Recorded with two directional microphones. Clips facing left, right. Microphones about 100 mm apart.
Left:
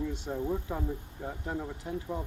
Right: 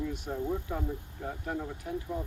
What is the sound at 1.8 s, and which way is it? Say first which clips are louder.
Speech: right 1 dB; 25° left (ahead or behind).